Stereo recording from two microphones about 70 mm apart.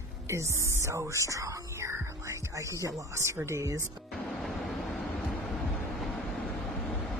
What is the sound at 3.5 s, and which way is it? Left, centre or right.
Speech, right.